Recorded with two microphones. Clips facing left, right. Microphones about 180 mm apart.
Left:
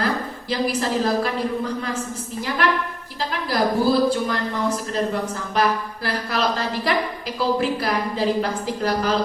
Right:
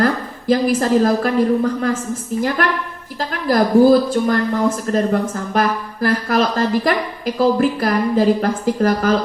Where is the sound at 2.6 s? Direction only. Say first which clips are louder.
Right 2 dB; 45° right (ahead or behind).